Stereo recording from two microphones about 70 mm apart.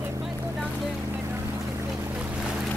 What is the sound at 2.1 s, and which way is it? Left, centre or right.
Boat, centre.